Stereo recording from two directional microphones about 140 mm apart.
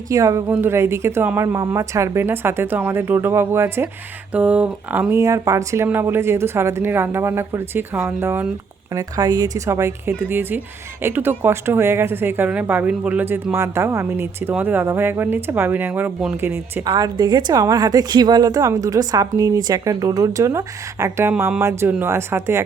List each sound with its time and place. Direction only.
0.1 s a woman's voice: 25° right (ahead or behind)
16.8 s a woman's voice: 25° right (ahead or behind)